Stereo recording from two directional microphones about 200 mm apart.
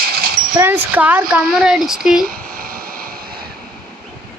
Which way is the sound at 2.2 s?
45° right (ahead or behind).